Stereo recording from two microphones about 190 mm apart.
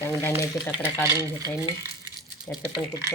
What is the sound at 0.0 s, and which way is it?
Speech, 15° left (ahead or behind).